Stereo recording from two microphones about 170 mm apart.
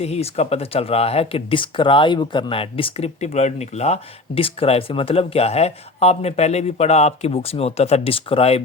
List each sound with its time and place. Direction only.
0.0 s speech: 40° left (ahead or behind)